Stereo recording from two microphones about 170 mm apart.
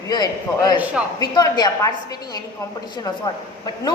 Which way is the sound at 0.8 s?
5° right (ahead or behind).